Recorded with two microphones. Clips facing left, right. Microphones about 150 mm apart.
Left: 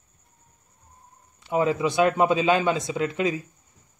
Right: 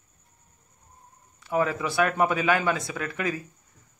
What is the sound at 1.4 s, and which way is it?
Speech, 20° left (ahead or behind).